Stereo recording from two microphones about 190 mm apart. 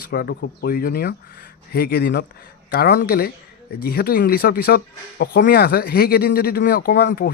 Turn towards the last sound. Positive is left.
turn(degrees=55)  # may be behind; listen again after turning